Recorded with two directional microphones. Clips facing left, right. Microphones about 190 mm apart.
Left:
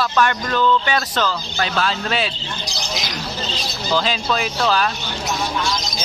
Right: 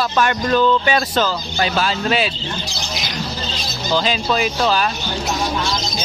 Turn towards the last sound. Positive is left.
turn(degrees=-5)  # may be behind; listen again after turning